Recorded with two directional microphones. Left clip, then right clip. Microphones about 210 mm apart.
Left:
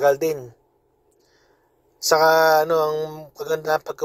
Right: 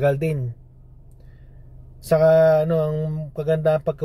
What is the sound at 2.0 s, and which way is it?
Speech, 10° left (ahead or behind).